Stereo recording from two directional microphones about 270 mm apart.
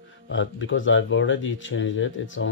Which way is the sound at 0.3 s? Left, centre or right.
Left.